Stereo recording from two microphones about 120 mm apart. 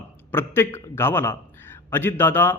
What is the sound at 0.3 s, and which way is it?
A man's voice, 20° left (ahead or behind).